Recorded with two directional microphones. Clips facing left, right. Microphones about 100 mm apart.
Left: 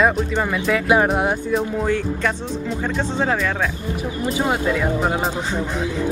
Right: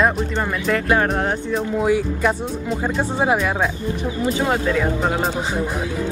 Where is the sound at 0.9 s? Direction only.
10° left (ahead or behind).